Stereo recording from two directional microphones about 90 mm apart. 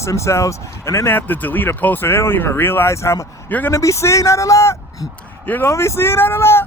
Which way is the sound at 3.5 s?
20° left (ahead or behind).